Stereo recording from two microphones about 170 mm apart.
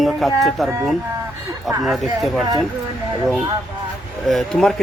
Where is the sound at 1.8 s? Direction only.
Centre (ahead or behind).